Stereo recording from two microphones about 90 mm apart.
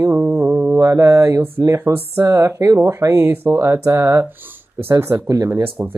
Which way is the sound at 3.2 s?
30° right (ahead or behind).